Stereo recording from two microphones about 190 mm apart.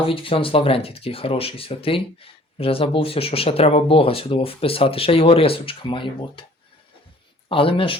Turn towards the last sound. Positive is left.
turn(degrees=30)  # may be behind; listen again after turning